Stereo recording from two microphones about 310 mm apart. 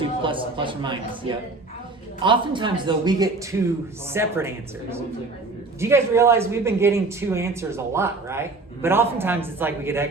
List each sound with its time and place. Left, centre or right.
0.2 s speech: centre